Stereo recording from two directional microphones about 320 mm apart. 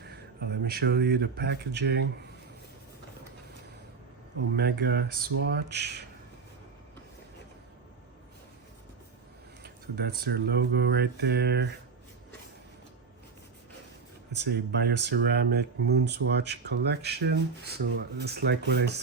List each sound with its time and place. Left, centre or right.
0.0 s speech: right
4.5 s speech: right
9.6 s speech: right
14.3 s speech: right